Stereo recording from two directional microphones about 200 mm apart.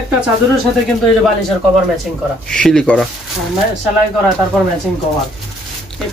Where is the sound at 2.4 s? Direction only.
5° left (ahead or behind).